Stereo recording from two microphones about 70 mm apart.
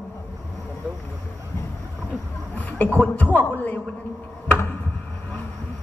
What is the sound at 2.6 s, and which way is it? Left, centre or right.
A man's voice, left.